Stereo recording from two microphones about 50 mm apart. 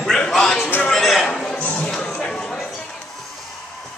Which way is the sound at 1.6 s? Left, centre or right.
Left.